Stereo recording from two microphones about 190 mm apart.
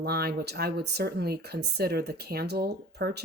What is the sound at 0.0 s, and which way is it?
Speech, 55° right (ahead or behind).